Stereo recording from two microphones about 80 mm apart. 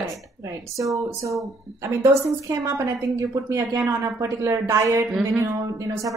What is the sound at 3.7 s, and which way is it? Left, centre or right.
A woman's voice, right.